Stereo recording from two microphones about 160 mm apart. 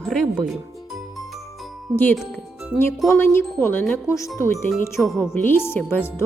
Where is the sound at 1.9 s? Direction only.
15° left (ahead or behind).